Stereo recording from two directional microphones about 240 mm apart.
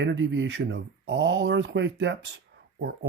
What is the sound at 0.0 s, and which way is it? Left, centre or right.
Speech, right.